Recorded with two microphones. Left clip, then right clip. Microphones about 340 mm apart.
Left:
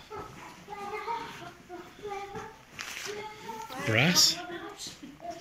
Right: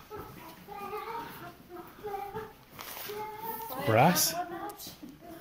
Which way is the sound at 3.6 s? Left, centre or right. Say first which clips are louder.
Right 3 dB; right.